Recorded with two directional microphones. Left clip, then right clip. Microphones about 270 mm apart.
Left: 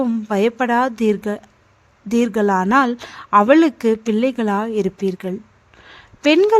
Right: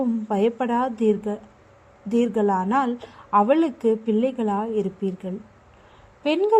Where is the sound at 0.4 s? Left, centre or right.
Left.